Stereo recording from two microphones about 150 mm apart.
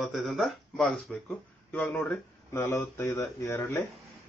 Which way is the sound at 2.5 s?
20° left (ahead or behind).